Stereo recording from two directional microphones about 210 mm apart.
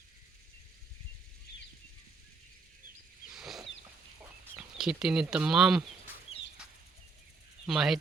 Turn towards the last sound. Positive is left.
turn(degrees=0)  # may be behind; listen again after turning